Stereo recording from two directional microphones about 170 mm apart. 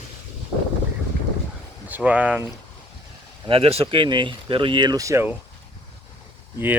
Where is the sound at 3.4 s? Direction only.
35° right (ahead or behind); by 5.3 s 15° right (ahead or behind).